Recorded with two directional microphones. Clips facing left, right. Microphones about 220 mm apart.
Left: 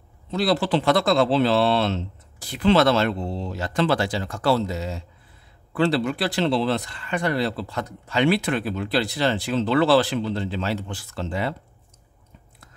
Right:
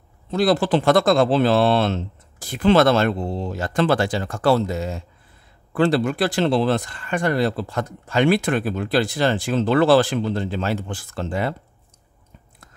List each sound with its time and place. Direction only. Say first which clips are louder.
0.3 s speech: right 3 dB; 50° right (ahead or behind)